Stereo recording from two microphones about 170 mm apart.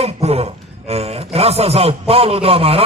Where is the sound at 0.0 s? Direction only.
35° right (ahead or behind).